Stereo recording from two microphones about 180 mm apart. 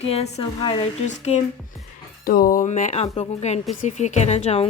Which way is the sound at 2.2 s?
55° left (ahead or behind).